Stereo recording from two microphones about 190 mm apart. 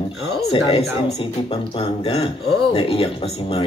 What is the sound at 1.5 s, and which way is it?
Speech, 30° left (ahead or behind).